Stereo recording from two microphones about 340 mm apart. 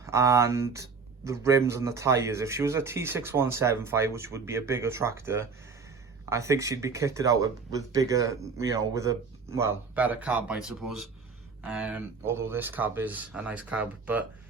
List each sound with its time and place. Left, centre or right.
0.0 s speech: centre
10.8 s speech: right
11.6 s speech: centre